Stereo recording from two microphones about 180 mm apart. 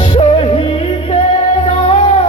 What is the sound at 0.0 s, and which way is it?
Music, 35° left (ahead or behind).